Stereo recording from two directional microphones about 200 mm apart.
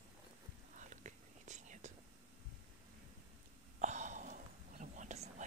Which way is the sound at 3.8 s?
35° right (ahead or behind).